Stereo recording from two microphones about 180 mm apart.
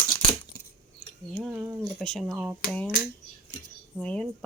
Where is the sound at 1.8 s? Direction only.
5° left (ahead or behind).